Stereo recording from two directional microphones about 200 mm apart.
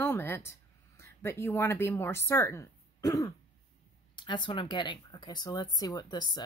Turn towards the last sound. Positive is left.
turn(degrees=20)  # may be behind; listen again after turning